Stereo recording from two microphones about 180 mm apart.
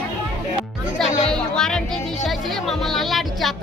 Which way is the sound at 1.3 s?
5° left (ahead or behind).